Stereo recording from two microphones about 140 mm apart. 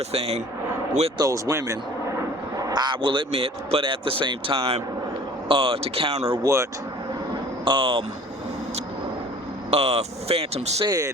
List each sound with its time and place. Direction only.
0.1 s speech: 45° right (ahead or behind)
1.2 s speech: 20° right (ahead or behind); by 6.4 s 45° right (ahead or behind)
6.4 s speech: 20° right (ahead or behind)
7.6 s speech: 40° right (ahead or behind)
9.6 s speech: 50° right (ahead or behind)
10.8 s speech: 25° right (ahead or behind)